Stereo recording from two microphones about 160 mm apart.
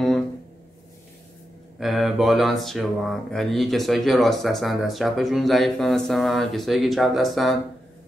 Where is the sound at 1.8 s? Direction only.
Centre (ahead or behind).